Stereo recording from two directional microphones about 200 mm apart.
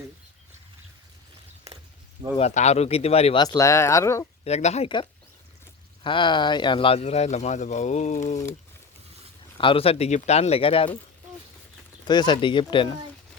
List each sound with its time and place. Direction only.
2.4 s speech: 35° left (ahead or behind)
3.4 s speech: 20° left (ahead or behind)
4.4 s speech: 35° left (ahead or behind)
9.6 s speech: 25° left (ahead or behind)
12.0 s speech: 20° left (ahead or behind)